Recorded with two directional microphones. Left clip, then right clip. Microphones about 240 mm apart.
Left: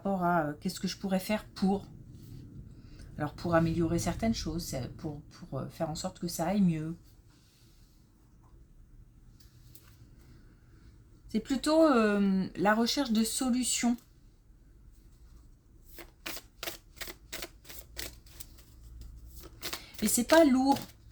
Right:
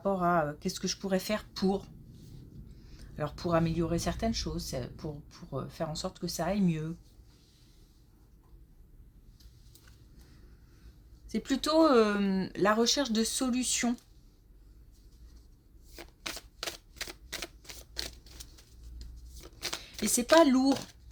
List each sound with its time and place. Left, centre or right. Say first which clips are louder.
0.0 s speech: right 1 dB; right
2.9 s speech: right 1 dB; right
11.3 s speech: even; right
16.0 s typewriter: right 2 dB; centre
19.4 s a sound: right 2 dB; centre
20.4 s speech: even; right